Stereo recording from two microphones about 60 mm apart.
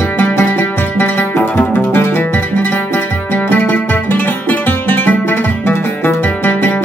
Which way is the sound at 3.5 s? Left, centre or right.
Left.